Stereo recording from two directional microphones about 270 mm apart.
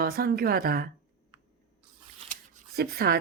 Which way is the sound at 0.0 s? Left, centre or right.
Right.